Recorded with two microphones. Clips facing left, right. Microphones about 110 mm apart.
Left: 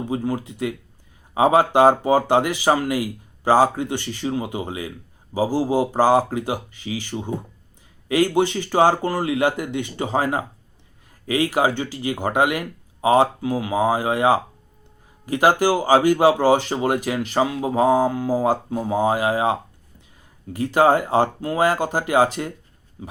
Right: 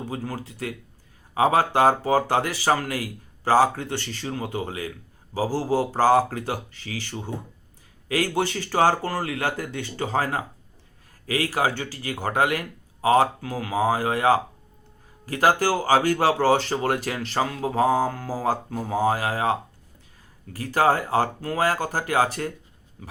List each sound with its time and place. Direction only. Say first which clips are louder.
0.0 s speech: left 7 dB; 15° left (ahead or behind)
23.0 s pig: left 6 dB; 20° left (ahead or behind)